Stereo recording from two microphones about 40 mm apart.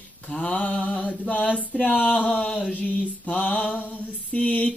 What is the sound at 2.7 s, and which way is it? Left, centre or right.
Mantra, left.